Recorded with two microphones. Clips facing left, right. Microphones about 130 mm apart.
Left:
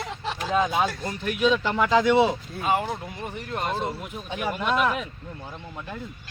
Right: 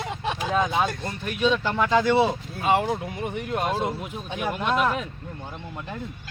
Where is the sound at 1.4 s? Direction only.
5° left (ahead or behind).